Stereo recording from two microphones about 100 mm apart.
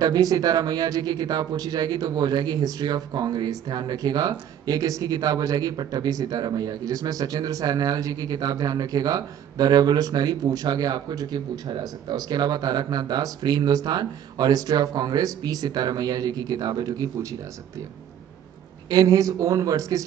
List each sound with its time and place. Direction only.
0.0 s speech: 40° right (ahead or behind)
18.9 s speech: 40° right (ahead or behind)